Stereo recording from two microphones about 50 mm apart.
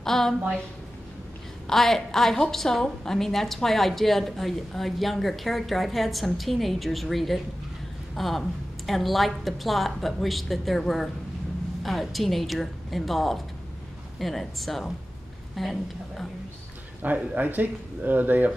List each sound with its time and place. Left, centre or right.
0.0 s a woman's voice: centre
1.7 s a woman's voice: centre
17.0 s speech: right